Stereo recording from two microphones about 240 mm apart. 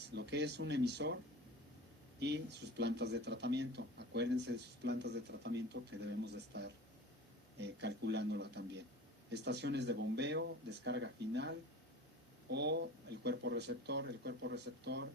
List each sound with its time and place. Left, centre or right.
0.1 s speech: right